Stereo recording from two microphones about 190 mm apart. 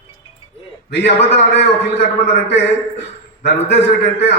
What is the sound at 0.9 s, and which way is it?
A man's voice, 65° left (ahead or behind).